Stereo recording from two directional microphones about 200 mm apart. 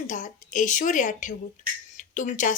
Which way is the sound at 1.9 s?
40° left (ahead or behind).